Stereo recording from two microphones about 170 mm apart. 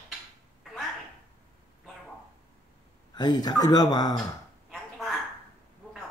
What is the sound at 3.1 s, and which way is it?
A man's voice, 25° left (ahead or behind).